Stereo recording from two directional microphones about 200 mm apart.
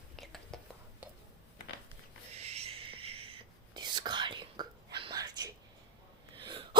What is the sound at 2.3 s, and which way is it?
Whispering, 30° right (ahead or behind).